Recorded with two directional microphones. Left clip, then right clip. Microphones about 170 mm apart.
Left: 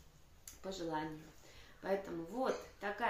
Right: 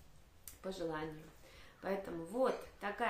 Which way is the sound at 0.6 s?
20° right (ahead or behind).